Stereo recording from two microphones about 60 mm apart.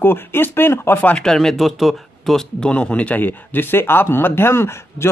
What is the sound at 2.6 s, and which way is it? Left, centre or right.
A man's voice, centre.